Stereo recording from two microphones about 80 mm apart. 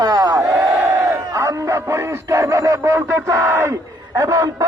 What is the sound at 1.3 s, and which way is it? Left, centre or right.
Speech, right.